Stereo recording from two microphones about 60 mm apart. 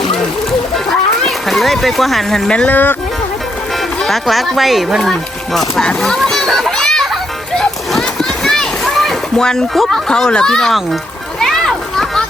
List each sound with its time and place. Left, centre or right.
1.2 s speech: centre
2.6 s speech: left
4.0 s speech: centre
5.5 s speech: centre
6.2 s children playing: centre
7.5 s a sound: centre
10.1 s speech: centre
11.3 s a sound: centre